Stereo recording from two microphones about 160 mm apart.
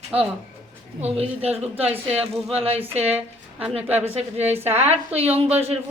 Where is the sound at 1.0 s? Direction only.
40° right (ahead or behind).